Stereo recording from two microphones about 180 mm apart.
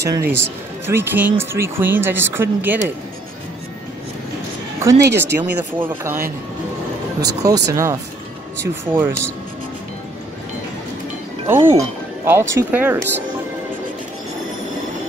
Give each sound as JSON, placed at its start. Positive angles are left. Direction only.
{"t": 0.1, "sound": "speech", "side_deg": -15}
{"t": 4.7, "sound": "speech", "side_deg": -15}
{"t": 7.2, "sound": "speech", "side_deg": -20}
{"t": 11.4, "sound": "speech", "side_deg": -10}